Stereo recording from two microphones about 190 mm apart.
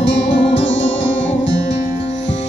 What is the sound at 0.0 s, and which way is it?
Music, 70° left (ahead or behind).